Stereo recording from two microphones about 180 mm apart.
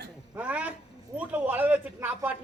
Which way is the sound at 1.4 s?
10° right (ahead or behind).